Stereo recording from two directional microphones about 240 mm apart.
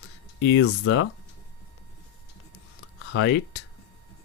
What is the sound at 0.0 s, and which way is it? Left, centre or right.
Speech, left.